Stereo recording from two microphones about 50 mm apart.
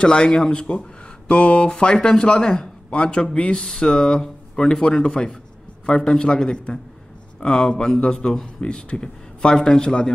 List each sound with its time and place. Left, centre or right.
0.0 s speech: centre